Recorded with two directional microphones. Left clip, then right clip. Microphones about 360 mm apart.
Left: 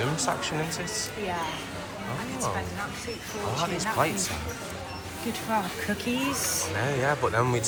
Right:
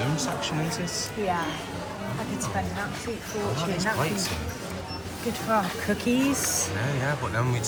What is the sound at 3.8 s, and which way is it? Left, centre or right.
Speech, centre.